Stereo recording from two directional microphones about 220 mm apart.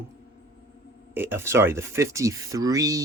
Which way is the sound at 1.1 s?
10° right (ahead or behind).